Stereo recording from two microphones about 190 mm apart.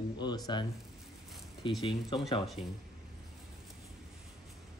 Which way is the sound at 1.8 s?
30° left (ahead or behind).